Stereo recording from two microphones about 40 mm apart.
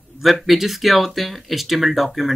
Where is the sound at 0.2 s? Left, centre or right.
Centre.